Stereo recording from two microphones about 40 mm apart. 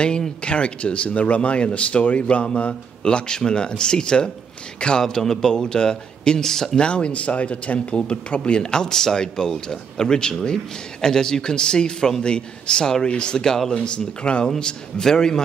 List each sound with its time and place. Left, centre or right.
0.0 s speech: left
5.0 s speech: centre
6.8 s speech: left
13.7 s speech: left